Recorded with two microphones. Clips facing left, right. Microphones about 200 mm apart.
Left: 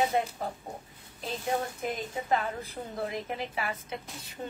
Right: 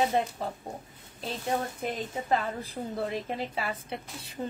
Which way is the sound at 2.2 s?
35° right (ahead or behind).